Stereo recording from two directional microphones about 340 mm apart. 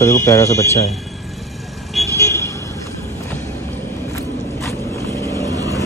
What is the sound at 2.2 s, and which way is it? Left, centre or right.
Vehicle, centre.